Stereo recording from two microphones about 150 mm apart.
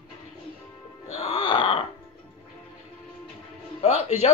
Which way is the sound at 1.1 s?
45° left (ahead or behind).